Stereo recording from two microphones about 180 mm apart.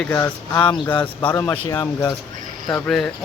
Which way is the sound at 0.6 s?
30° left (ahead or behind).